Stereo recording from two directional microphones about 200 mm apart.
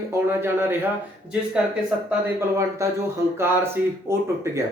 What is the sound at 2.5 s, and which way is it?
Speech, 15° right (ahead or behind).